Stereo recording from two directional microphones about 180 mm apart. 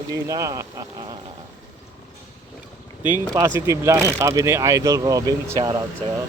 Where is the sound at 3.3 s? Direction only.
20° right (ahead or behind).